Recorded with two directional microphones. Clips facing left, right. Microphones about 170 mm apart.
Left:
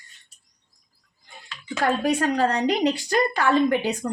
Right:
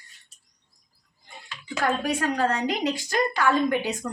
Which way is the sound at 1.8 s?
30° left (ahead or behind).